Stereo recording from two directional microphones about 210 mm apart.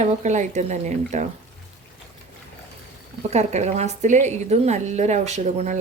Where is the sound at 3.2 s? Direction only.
30° right (ahead or behind).